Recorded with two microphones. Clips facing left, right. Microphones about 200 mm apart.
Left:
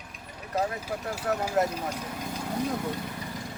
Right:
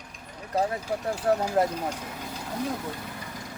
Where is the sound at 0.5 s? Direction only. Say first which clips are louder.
Right 3 dB; 30° right (ahead or behind).